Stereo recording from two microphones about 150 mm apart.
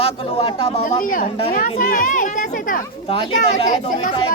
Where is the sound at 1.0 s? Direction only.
65° left (ahead or behind).